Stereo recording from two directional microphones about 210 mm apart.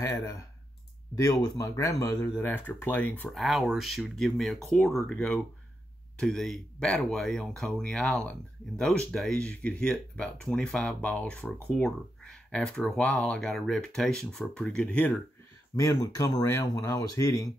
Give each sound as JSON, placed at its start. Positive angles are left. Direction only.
{"t": 0.0, "sound": "speech", "side_deg": 15}
{"t": 15.7, "sound": "speech", "side_deg": 15}